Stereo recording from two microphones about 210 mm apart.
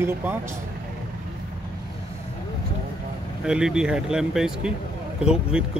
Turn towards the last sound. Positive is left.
turn(degrees=-5)  # may be behind; listen again after turning